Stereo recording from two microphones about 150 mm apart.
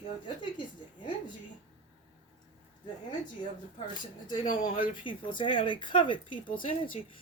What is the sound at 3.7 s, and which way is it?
A woman's voice, 30° left (ahead or behind).